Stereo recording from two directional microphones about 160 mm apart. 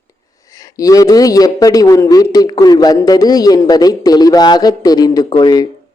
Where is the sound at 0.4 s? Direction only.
20° left (ahead or behind).